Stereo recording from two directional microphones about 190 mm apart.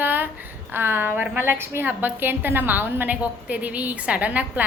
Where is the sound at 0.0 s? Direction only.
10° right (ahead or behind).